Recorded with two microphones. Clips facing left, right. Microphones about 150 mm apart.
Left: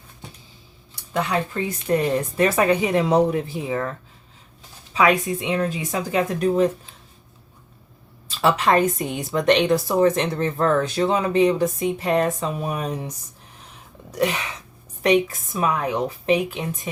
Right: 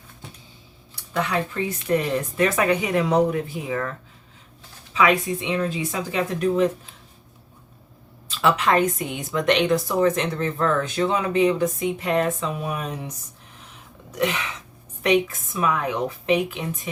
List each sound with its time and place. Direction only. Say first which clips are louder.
1.1 s a woman's voice: left 1 dB; 30° left (ahead or behind)
4.9 s a woman's voice: left 1 dB; 45° left (ahead or behind)
8.3 s a woman's voice: left 1 dB; 35° left (ahead or behind)
14.2 s a woman's voice: left 2 dB; 40° left (ahead or behind)